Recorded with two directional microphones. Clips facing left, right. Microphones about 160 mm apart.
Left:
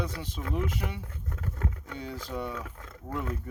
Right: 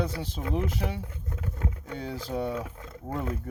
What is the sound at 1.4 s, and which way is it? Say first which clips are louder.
Vehicle: right 1 dB; 20° right (ahead or behind).